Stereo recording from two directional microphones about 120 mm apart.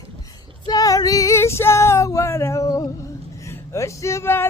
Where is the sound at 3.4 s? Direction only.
25° left (ahead or behind).